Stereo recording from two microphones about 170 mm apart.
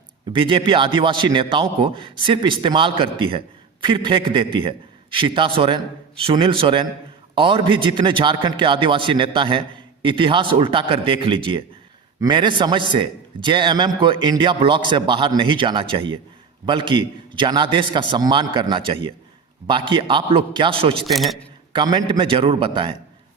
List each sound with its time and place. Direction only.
0.3 s a man's voice: 30° right (ahead or behind)
21.1 s a man's voice: centre (ahead or behind)
21.7 s a man's voice: 25° right (ahead or behind)